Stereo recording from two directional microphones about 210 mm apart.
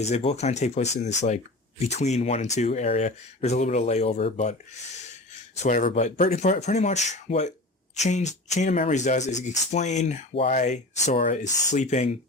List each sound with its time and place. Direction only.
0.0 s speech: 30° left (ahead or behind)
5.6 s speech: 35° left (ahead or behind)